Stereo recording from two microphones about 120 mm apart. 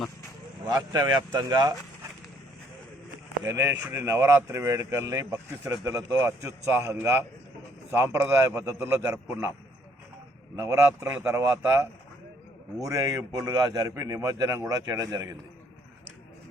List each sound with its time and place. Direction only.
0.7 s speech: 30° right (ahead or behind)
3.4 s speech: 25° right (ahead or behind)
10.6 s speech: 25° right (ahead or behind)